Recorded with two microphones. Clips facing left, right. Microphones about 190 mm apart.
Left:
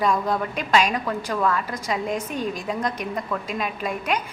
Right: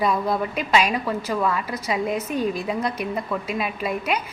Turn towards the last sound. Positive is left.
turn(degrees=-5)  # may be behind; listen again after turning